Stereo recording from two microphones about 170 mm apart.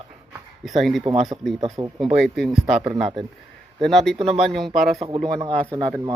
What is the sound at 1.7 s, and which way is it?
Speech, 20° right (ahead or behind).